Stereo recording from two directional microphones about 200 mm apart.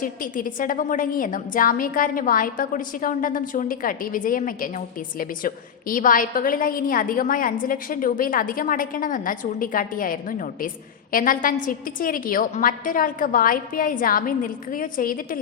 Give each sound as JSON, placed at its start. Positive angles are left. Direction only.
{"t": 0.0, "sound": "a woman's voice", "side_deg": 45}